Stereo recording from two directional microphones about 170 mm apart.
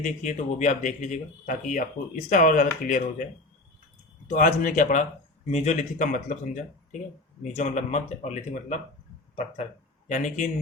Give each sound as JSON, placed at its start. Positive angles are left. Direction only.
{"t": 0.0, "sound": "speech", "side_deg": 45}
{"t": 4.3, "sound": "speech", "side_deg": 50}
{"t": 10.1, "sound": "speech", "side_deg": 45}